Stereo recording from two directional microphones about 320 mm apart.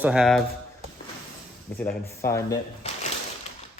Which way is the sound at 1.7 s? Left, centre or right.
Centre.